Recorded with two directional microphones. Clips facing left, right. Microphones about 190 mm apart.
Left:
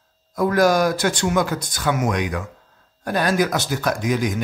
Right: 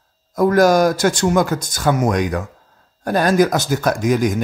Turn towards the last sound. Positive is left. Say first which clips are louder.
# right 5 dB
turn(degrees=-45)  # may be behind; listen again after turning